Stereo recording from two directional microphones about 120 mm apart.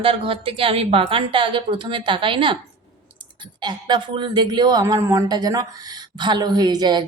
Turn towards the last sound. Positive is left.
turn(degrees=-35)  # may be behind; listen again after turning